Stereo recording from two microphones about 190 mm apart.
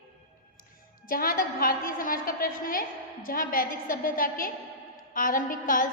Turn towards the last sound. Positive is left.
turn(degrees=45)  # may be behind; listen again after turning